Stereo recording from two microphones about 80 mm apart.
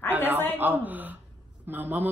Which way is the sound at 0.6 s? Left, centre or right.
Right.